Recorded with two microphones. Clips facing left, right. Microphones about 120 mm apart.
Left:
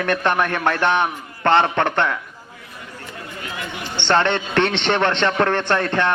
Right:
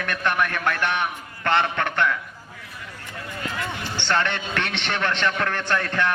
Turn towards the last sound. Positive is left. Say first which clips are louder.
# left 4 dB
turn(degrees=35)  # may be behind; listen again after turning